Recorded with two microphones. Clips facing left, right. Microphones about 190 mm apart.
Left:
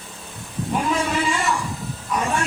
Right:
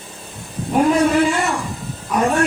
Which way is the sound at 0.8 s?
60° right (ahead or behind).